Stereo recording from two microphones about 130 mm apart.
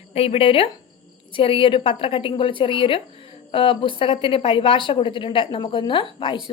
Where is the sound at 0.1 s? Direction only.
50° left (ahead or behind).